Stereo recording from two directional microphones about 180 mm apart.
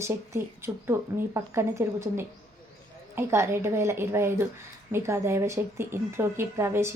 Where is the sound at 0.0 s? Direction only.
15° right (ahead or behind).